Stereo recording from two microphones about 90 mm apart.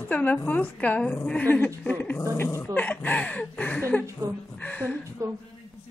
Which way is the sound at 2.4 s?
30° left (ahead or behind).